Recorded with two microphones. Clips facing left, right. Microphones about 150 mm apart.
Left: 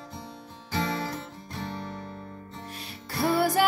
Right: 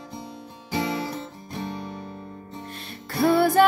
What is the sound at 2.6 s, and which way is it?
Music, 10° left (ahead or behind).